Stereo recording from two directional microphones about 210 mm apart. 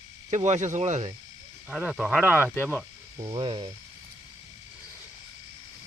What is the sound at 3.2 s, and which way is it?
Mains hum, 25° right (ahead or behind).